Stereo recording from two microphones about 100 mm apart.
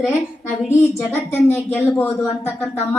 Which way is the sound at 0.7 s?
25° left (ahead or behind).